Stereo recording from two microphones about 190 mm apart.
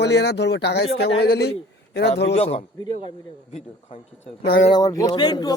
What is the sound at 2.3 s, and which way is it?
A man's voice, 30° left (ahead or behind).